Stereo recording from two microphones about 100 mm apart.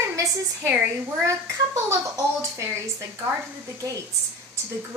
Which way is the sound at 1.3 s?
30° right (ahead or behind).